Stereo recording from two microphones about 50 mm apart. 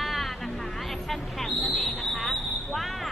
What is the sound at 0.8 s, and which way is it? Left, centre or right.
Vehicle, centre.